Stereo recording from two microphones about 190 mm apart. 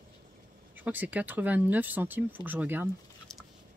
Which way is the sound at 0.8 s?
10° right (ahead or behind).